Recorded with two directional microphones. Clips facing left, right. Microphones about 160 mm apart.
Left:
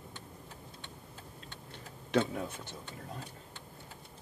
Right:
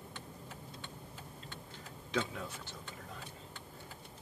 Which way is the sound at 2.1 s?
60° left (ahead or behind).